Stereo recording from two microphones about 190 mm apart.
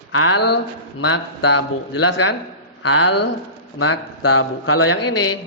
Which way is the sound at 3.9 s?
85° left.